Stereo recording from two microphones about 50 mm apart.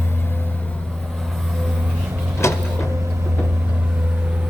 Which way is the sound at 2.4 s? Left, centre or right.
Left.